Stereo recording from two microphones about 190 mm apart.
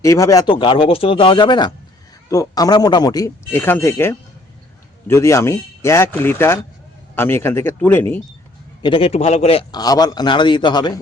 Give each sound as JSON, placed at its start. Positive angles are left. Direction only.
{"t": 0.0, "sound": "a man's voice", "side_deg": 15}
{"t": 8.8, "sound": "a man's voice", "side_deg": 30}